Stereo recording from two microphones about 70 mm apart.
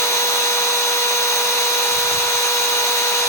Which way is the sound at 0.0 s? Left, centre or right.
Left.